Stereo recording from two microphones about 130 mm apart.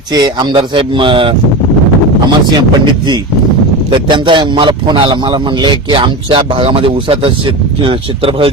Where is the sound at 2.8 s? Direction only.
35° right (ahead or behind).